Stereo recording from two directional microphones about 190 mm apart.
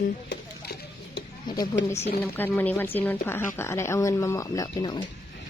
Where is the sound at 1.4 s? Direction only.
20° left (ahead or behind).